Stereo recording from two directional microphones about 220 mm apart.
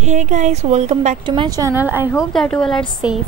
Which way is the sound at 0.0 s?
30° right (ahead or behind).